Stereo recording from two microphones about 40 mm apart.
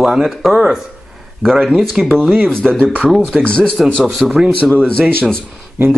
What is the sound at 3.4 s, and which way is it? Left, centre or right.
Speech, centre.